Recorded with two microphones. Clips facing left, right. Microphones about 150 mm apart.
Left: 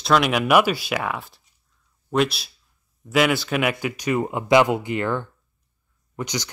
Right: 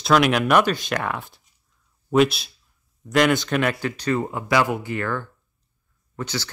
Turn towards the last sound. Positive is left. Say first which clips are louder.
# left 1 dB
turn(degrees=15)  # may be behind; listen again after turning